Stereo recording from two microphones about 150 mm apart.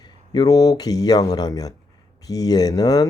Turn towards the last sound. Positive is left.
turn(degrees=25)  # may be behind; listen again after turning